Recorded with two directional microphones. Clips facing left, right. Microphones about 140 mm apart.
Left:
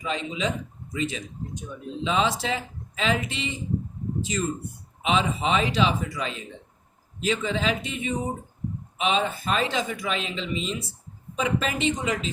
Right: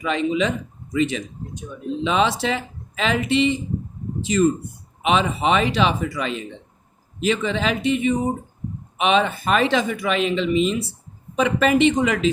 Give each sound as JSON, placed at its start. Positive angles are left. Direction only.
{"t": 0.0, "sound": "speech", "side_deg": -65}